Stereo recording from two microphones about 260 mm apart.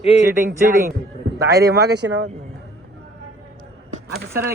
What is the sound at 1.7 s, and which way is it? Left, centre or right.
Speech, right.